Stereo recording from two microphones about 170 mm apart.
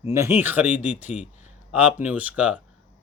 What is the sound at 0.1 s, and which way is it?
A man's voice, 15° right (ahead or behind).